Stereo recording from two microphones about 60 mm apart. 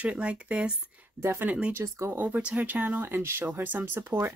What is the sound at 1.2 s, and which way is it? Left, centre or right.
Speech, right.